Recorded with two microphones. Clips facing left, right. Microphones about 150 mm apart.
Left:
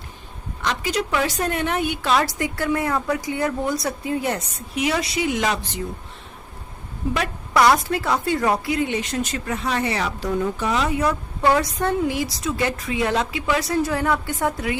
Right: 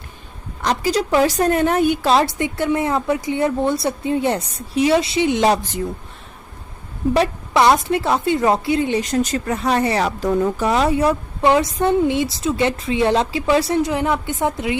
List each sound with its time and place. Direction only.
0.6 s speech: 40° right (ahead or behind)
2.1 s speech: 25° right (ahead or behind)
7.5 s a woman's voice: 25° right (ahead or behind)